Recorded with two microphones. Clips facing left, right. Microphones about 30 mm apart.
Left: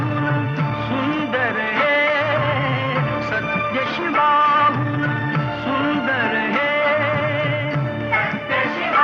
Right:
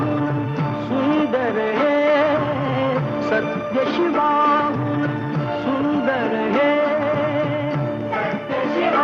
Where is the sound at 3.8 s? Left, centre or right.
Centre.